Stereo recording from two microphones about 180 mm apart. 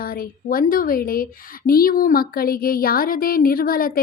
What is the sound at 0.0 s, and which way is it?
A woman's voice, 55° left (ahead or behind).